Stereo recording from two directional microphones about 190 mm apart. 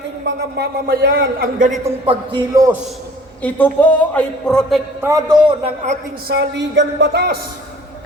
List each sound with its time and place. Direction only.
0.3 s a man's voice: 60° right (ahead or behind)
2.0 s a man's voice: 20° right (ahead or behind)
3.4 s a man's voice: 10° left (ahead or behind)
4.9 s a man's voice: 15° right (ahead or behind)
6.2 s speech: 60° right (ahead or behind)